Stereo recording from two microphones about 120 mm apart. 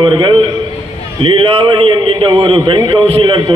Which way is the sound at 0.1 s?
45° right (ahead or behind).